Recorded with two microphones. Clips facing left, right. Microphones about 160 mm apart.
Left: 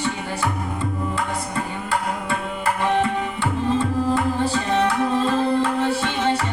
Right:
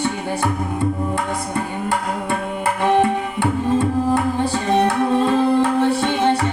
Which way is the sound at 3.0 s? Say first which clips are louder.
Right 4 dB; 55° right (ahead or behind).